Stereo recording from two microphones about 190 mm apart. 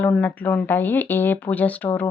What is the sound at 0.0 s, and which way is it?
Speech, 10° left (ahead or behind).